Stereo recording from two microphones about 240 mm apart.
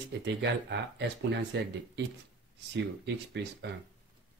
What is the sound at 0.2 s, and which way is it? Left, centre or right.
Speech, right.